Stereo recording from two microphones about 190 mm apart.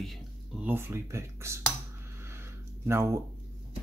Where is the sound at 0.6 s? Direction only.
10° right (ahead or behind).